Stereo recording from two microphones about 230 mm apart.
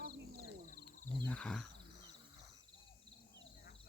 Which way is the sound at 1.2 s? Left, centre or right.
Centre.